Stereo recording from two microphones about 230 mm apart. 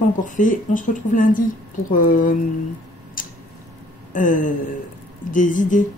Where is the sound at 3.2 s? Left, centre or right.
Left.